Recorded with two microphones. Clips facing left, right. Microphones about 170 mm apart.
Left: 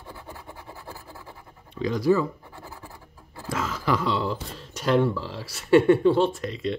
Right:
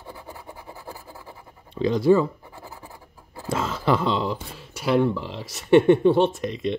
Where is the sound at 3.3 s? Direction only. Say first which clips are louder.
Right 3 dB; 25° right (ahead or behind).